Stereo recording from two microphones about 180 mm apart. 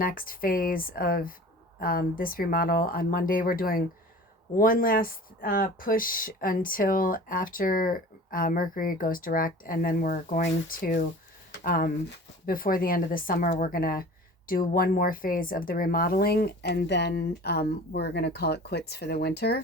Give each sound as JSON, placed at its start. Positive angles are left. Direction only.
{"t": 0.0, "sound": "a woman's voice", "side_deg": 50}